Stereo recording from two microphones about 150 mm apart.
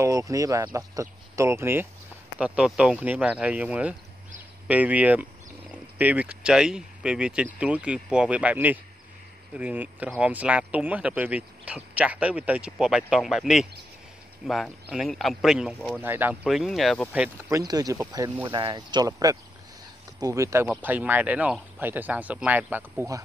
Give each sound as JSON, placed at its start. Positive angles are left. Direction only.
{"t": 0.0, "sound": "speech", "side_deg": -20}
{"t": 16.0, "sound": "speech", "side_deg": -15}
{"t": 16.4, "sound": "speech", "side_deg": 0}
{"t": 17.5, "sound": "speech", "side_deg": -20}